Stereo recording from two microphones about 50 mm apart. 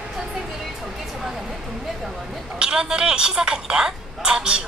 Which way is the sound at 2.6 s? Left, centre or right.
Centre.